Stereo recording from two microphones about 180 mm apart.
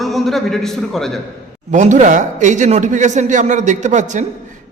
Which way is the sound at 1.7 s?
45° right (ahead or behind).